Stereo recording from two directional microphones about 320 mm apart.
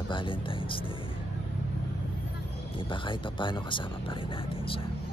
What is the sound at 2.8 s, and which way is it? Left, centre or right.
A man's voice, centre.